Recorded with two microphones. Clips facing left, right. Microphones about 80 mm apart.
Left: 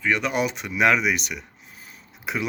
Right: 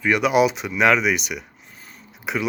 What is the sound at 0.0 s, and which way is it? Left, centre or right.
Speech, centre.